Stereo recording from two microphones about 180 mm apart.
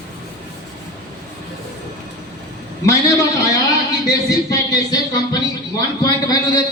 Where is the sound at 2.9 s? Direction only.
15° left (ahead or behind).